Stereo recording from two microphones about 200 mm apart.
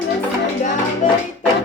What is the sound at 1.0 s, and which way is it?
Music, 40° left (ahead or behind).